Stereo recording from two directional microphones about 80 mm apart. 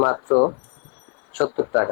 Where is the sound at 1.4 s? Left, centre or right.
Left.